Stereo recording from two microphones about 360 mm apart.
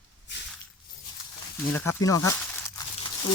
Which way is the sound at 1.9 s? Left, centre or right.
Centre.